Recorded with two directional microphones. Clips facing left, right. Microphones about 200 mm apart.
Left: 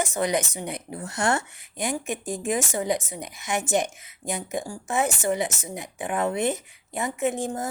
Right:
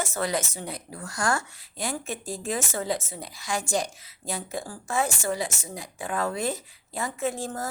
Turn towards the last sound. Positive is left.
turn(degrees=20)  # may be behind; listen again after turning